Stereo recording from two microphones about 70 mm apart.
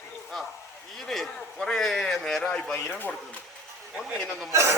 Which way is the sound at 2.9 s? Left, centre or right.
Left.